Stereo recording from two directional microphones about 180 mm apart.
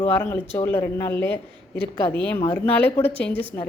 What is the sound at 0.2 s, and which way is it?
Speech, 10° left (ahead or behind).